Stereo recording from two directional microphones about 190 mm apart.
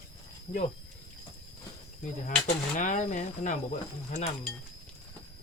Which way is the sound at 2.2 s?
40° left (ahead or behind).